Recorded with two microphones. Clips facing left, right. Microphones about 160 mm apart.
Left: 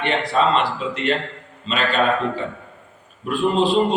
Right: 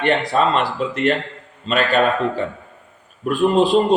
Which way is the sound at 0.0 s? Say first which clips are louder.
Right 2 dB; 45° right (ahead or behind).